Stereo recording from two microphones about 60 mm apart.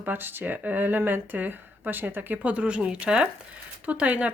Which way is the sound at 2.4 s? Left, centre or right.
Right.